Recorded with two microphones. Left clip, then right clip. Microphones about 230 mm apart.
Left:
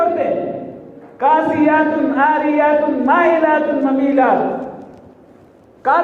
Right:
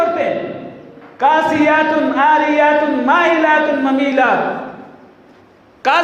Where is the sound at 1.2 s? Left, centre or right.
Right.